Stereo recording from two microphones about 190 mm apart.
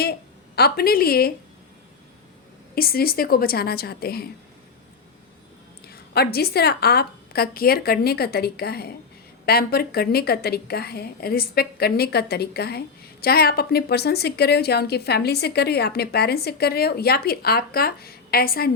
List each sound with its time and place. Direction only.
0.0 s a woman's voice: 55° left (ahead or behind)
2.7 s a woman's voice: 50° left (ahead or behind)
6.1 s a woman's voice: 55° left (ahead or behind)